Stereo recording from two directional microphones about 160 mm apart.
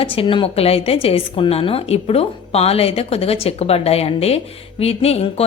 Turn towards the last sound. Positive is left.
turn(degrees=40)  # may be behind; listen again after turning